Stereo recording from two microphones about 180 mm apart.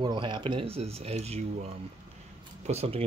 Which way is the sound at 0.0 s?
25° right (ahead or behind).